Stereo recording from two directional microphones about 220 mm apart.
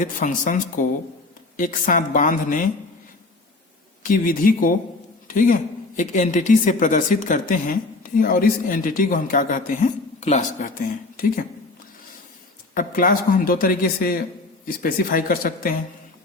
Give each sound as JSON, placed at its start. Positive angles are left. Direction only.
{"t": 0.0, "sound": "speech", "side_deg": 35}
{"t": 4.0, "sound": "a man's voice", "side_deg": 40}
{"t": 12.7, "sound": "speech", "side_deg": 40}